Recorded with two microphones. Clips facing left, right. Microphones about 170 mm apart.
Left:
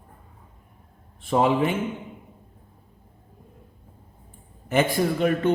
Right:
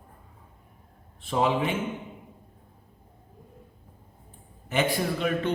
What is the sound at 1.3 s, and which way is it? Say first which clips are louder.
Speech: left 4 dB; 50° left (ahead or behind).